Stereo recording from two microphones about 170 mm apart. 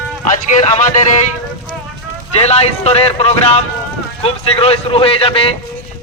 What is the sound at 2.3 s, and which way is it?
A man's voice, 40° left (ahead or behind).